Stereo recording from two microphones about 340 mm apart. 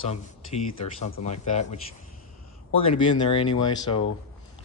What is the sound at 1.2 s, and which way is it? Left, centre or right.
Speech, centre.